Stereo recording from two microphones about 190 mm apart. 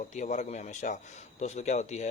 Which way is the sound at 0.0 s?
40° left (ahead or behind).